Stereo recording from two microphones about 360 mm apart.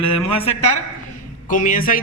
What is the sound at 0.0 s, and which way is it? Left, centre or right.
Speech, centre.